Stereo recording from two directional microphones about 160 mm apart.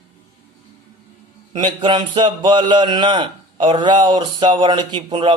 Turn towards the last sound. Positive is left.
turn(degrees=-30)  # may be behind; listen again after turning